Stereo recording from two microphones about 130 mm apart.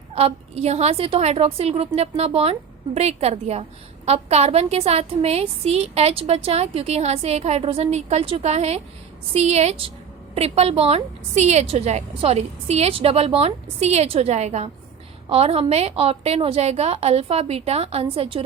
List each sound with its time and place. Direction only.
0.1 s a woman's voice: 50° right (ahead or behind)